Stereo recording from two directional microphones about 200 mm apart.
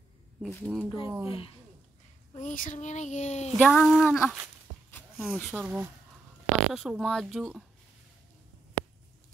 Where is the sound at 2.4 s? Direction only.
40° left (ahead or behind).